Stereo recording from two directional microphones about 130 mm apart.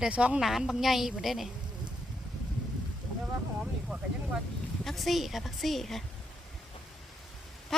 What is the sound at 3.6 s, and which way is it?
Vehicle, 5° right (ahead or behind).